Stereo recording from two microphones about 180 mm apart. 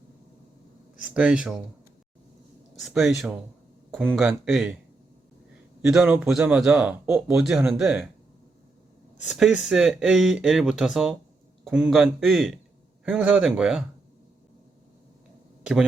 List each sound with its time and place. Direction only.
1.0 s speech: 5° right (ahead or behind)
2.8 s speech: centre (ahead or behind)
5.9 s speech: 5° right (ahead or behind)
9.2 s speech: centre (ahead or behind)